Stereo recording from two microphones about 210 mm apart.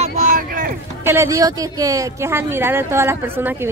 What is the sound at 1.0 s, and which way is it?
Speech, 15° right (ahead or behind).